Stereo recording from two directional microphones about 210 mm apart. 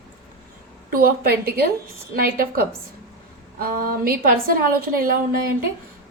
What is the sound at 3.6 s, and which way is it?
Speech, 45° right (ahead or behind).